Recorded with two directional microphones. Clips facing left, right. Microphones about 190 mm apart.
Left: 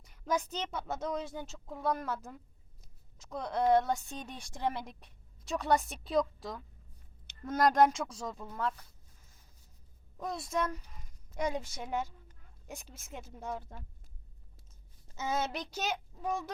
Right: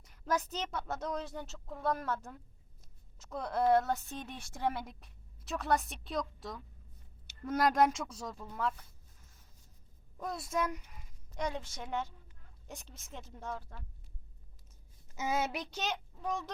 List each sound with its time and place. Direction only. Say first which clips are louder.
0.0 s speech: left 1 dB; centre (ahead or behind)
10.2 s speech: left 1 dB; 5° right (ahead or behind)
11.3 s a woman's voice: left 3 dB; 10° left (ahead or behind)
13.6 s speech: left 3 dB; 20° left (ahead or behind)
15.1 s a child's voice: even; 10° right (ahead or behind); by 16.5 s 10° left (ahead or behind)